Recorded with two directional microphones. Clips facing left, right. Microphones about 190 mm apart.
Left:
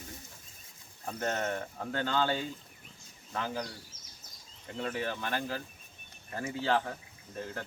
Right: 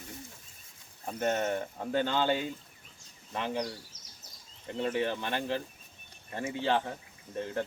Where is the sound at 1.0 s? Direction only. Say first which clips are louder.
Right 3 dB; 20° right (ahead or behind).